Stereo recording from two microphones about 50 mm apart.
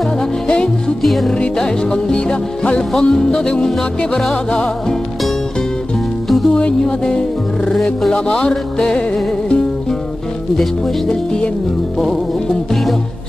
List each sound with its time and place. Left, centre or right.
0.5 s music: centre
1.0 s music: centre
1.6 s music: centre
2.9 s music: centre
3.3 s music: centre
6.2 s music: centre
6.5 s music: centre
7.7 s music: centre
8.1 s music: centre
11.1 s music: centre